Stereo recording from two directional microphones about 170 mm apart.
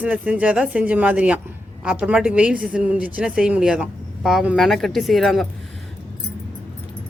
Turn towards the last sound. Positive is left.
turn(degrees=0)  # may be behind; listen again after turning